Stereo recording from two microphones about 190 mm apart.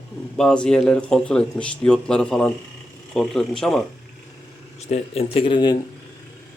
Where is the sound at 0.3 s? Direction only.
5° left (ahead or behind).